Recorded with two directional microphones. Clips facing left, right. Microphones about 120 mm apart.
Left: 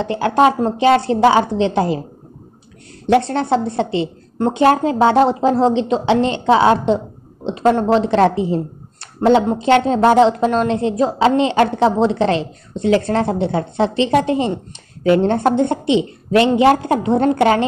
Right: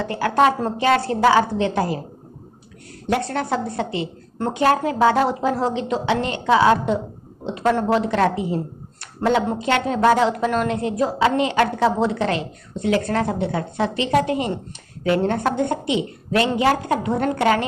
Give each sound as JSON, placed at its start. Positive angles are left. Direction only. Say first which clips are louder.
{"t": 0.0, "sound": "a woman's voice", "louder": "left 4 dB", "side_deg": 20}
{"t": 3.1, "sound": "a woman's voice", "louder": "left 7 dB", "side_deg": 25}